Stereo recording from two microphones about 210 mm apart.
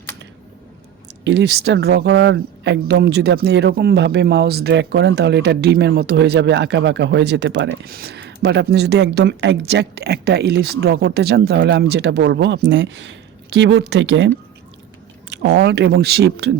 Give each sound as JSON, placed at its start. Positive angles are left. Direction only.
{"t": 1.2, "sound": "speech", "side_deg": -55}